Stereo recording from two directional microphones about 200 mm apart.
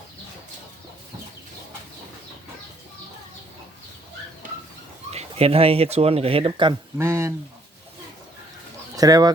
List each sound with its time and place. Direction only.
5.1 s speech: 30° right (ahead or behind)
7.0 s speech: 15° right (ahead or behind)
9.0 s speech: 20° right (ahead or behind)